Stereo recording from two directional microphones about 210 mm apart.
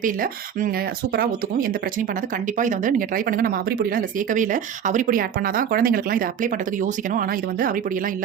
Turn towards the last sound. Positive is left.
turn(degrees=-40)  # may be behind; listen again after turning